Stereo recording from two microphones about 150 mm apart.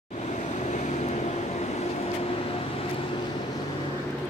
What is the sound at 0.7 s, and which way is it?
Vehicle, 50° left (ahead or behind).